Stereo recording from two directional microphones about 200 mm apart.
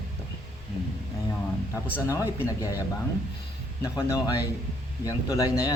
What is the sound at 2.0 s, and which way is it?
Speech, 15° left (ahead or behind).